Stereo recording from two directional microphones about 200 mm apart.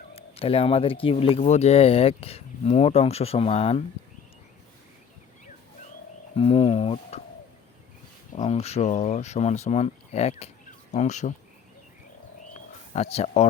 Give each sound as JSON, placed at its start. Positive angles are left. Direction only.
{"t": 0.1, "sound": "speech", "side_deg": 30}
{"t": 6.3, "sound": "speech", "side_deg": 30}
{"t": 8.4, "sound": "speech", "side_deg": 30}
{"t": 12.9, "sound": "speech", "side_deg": 30}